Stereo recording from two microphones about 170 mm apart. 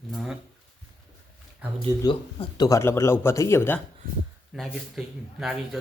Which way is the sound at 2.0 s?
25° left (ahead or behind).